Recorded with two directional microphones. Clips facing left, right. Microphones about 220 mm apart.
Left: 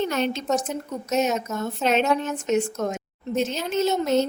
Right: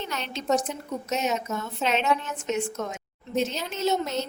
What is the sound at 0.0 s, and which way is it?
A woman's voice, 50° left (ahead or behind).